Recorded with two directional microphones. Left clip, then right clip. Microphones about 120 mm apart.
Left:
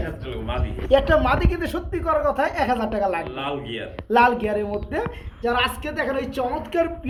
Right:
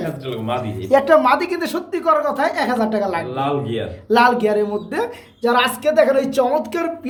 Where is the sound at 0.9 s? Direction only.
30° left (ahead or behind).